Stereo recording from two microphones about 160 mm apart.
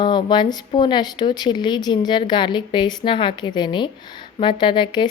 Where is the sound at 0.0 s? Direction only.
30° left (ahead or behind).